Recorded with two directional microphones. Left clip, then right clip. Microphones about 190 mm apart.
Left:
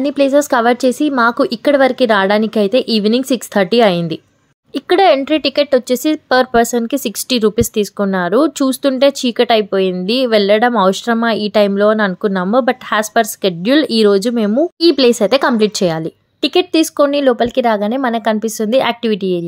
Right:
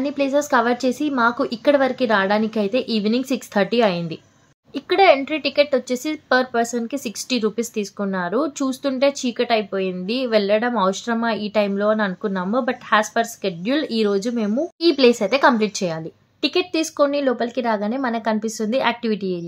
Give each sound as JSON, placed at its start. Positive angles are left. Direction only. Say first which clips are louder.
{"t": 0.0, "sound": "a woman's voice", "louder": "left 8 dB", "side_deg": 45}